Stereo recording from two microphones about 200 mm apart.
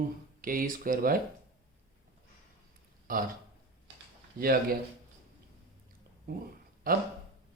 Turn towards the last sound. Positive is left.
turn(degrees=-45)  # may be behind; listen again after turning